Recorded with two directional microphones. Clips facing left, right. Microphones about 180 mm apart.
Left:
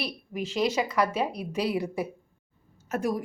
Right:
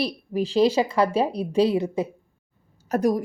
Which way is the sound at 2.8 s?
40° right (ahead or behind).